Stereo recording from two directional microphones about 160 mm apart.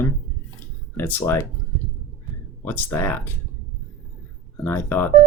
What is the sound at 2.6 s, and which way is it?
Speech, 15° left (ahead or behind).